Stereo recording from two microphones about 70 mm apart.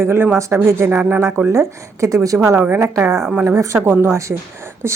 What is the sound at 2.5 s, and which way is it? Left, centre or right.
Speech, right.